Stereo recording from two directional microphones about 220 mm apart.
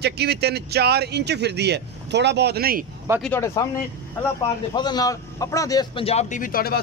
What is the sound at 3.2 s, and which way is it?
Speech, 10° left (ahead or behind).